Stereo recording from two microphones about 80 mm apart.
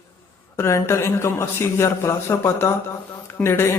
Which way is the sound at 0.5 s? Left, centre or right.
Left.